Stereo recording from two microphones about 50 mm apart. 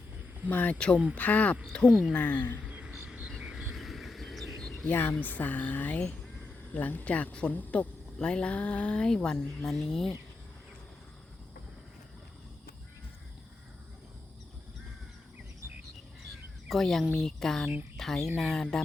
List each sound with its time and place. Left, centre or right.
0.4 s speech: left
1.7 s speech: centre
2.1 s speech: left
2.6 s a sound: right
2.9 s vehicle: centre
3.4 s a sound: centre
4.9 s speech: left
5.2 s speech: left
8.2 s speech: centre
16.6 s speech: centre